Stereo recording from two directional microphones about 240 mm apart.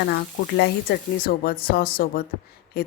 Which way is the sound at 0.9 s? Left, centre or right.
Left.